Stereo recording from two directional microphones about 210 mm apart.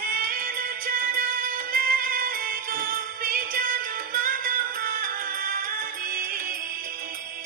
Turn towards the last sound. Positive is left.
turn(degrees=-45)  # may be behind; listen again after turning